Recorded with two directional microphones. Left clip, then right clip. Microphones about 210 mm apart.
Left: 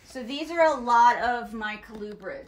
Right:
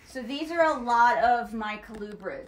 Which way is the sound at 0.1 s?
20° left (ahead or behind).